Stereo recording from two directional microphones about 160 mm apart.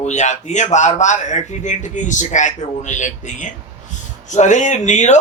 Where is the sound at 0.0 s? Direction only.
45° left (ahead or behind).